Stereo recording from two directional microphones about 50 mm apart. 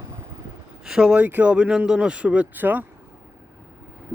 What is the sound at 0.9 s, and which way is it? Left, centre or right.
Speech, centre.